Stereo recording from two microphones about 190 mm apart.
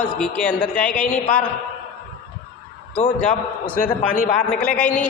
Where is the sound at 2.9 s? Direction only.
40° left (ahead or behind).